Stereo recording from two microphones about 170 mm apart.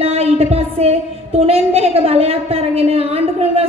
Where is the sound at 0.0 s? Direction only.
35° right (ahead or behind).